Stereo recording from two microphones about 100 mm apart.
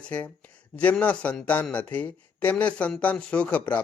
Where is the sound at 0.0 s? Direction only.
15° left (ahead or behind).